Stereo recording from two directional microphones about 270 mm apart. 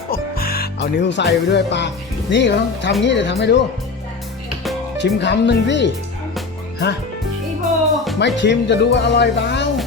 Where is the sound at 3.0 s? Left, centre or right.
Left.